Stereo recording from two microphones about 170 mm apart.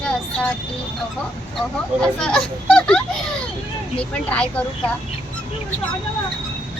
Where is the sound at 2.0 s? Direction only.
5° left (ahead or behind).